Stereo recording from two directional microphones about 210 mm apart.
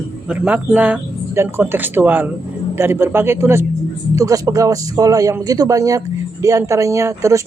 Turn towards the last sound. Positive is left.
turn(degrees=-15)  # may be behind; listen again after turning